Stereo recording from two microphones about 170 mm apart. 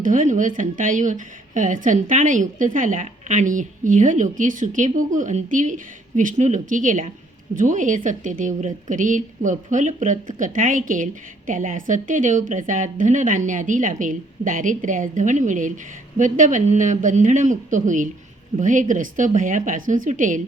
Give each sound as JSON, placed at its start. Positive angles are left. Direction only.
{"t": 0.0, "sound": "speech", "side_deg": -50}